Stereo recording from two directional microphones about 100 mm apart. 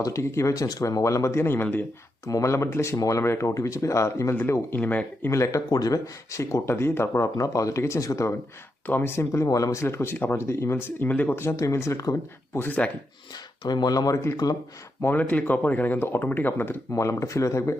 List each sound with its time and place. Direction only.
0.0 s speech: 30° left (ahead or behind)
5.3 s speech: 30° left (ahead or behind)
8.9 s speech: 20° left (ahead or behind)
9.8 s speech: 25° left (ahead or behind)
12.5 s speech: 15° left (ahead or behind)
13.7 s speech: 45° left (ahead or behind)
15.0 s speech: 15° left (ahead or behind)
16.9 s speech: 30° left (ahead or behind)